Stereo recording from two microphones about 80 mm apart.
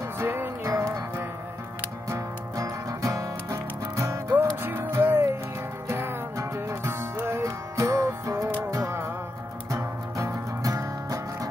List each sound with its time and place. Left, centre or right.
0.2 s music: right